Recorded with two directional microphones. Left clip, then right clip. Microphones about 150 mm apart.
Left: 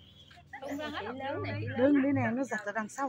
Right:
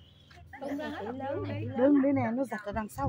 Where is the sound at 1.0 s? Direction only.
45° right (ahead or behind).